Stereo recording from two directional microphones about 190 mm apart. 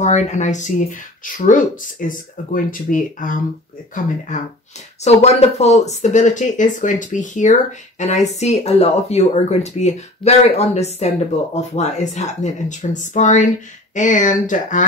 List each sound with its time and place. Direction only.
0.0 s speech: 40° left (ahead or behind)
5.0 s speech: 35° left (ahead or behind)